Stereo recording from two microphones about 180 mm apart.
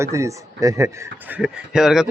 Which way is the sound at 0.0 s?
15° right (ahead or behind).